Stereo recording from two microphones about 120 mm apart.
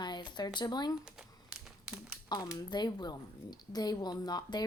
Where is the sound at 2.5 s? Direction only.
35° left (ahead or behind).